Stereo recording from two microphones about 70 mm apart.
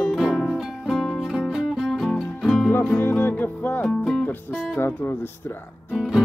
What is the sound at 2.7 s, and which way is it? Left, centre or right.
Music, left.